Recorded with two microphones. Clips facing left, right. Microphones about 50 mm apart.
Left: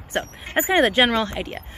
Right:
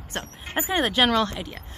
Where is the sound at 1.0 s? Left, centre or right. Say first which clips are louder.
Even; left.